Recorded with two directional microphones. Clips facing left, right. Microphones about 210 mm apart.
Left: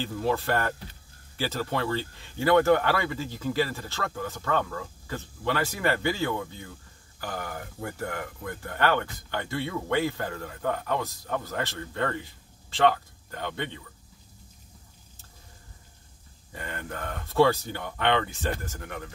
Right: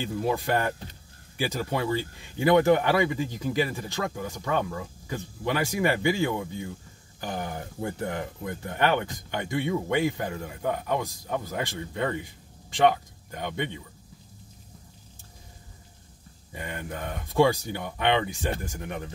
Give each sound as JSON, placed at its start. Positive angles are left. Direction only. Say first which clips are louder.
{"t": 0.0, "sound": "speech", "louder": "even", "side_deg": -15}
{"t": 16.5, "sound": "speech", "louder": "right 1 dB", "side_deg": -15}